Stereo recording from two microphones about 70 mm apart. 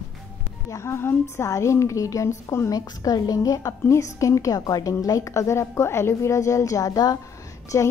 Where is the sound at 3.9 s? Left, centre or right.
Left.